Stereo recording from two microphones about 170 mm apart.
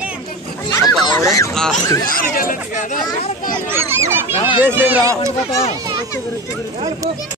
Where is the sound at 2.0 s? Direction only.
55° left (ahead or behind).